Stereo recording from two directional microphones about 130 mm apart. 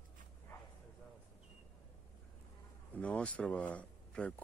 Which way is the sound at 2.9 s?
10° left (ahead or behind).